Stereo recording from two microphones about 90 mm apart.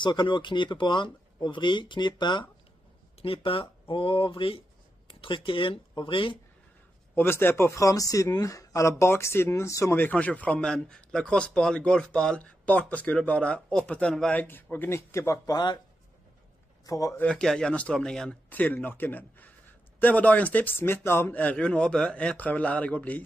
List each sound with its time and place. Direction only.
0.0 s speech: 60° left (ahead or behind)
3.2 s speech: 85° left
7.2 s speech: 25° left (ahead or behind)
9.9 s a man's voice: 20° left (ahead or behind)
14.4 s speech: 20° left (ahead or behind); by 15.8 s 50° left (ahead or behind)
16.8 s speech: 40° left (ahead or behind)
17.2 s a man's voice: 10° left (ahead or behind)
18.5 s a man's voice: 20° left (ahead or behind)